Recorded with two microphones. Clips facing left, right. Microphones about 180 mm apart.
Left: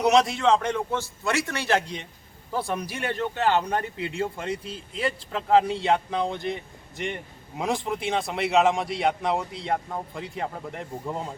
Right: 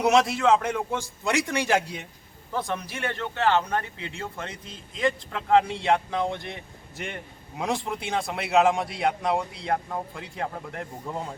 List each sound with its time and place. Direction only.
0.0 s a man's voice: centre (ahead or behind)
2.5 s a man's voice: 10° left (ahead or behind)